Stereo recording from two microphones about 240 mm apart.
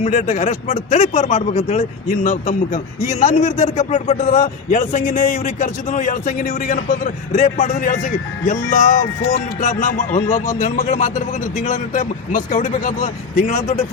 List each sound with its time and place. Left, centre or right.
0.0 s a man's voice: left